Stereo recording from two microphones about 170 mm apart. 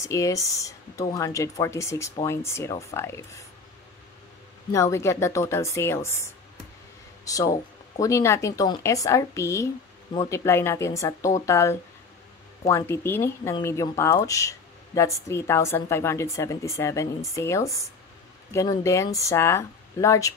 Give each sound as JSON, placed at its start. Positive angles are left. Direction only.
{"t": 0.0, "sound": "speech", "side_deg": 20}
{"t": 4.7, "sound": "speech", "side_deg": 15}